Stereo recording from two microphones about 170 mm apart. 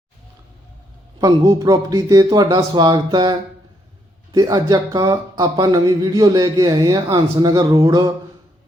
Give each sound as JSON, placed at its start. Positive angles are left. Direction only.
{"t": 1.2, "sound": "speech", "side_deg": -20}